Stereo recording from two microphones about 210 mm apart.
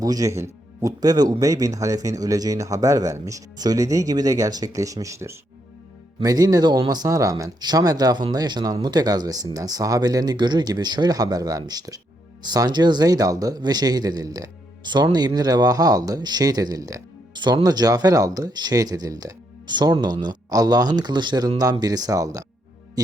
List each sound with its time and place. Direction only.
0.0 s speech: 15° right (ahead or behind)
23.0 s music: 15° right (ahead or behind)